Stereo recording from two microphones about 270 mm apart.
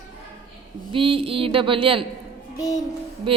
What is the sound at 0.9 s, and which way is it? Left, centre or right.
A man's voice, centre.